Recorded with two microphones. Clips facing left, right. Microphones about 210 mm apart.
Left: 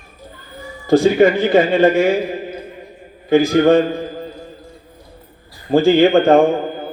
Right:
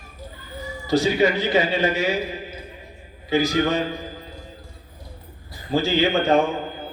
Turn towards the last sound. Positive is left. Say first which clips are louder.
# left 8 dB
turn(degrees=50)  # may be behind; listen again after turning